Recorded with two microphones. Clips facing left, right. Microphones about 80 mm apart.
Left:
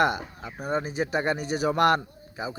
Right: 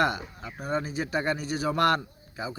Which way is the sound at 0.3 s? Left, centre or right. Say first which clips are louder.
Left 2 dB; centre.